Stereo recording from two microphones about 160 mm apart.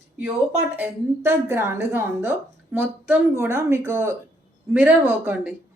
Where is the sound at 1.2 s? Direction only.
15° right (ahead or behind).